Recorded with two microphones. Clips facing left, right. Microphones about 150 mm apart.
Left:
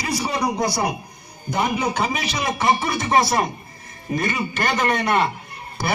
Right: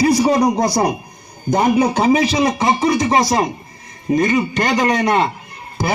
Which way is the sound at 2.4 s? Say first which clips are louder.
Right 5 dB; 20° right (ahead or behind).